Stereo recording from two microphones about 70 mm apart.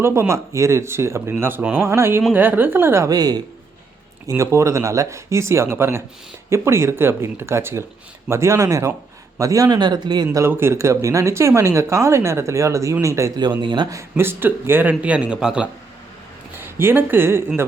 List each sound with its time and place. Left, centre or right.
0.0 s speech: right
3.1 s speech: right
4.3 s speech: right
9.7 s speech: right
10.4 s speech: right
13.3 s speech: right
14.2 s a man's voice: right; by 15.7 s centre
16.6 s speech: right